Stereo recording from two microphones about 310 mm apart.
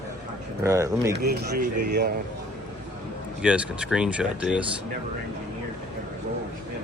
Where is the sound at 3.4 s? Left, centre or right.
Centre.